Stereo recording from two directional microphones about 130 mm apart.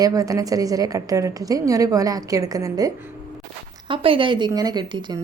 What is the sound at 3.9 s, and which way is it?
Speech, 40° right (ahead or behind).